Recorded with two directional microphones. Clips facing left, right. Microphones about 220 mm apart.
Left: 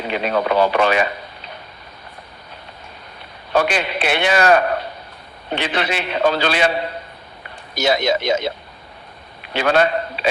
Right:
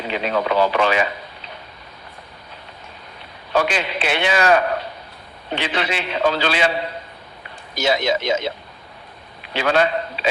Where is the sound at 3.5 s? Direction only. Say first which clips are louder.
Left 2 dB; 55° left (ahead or behind).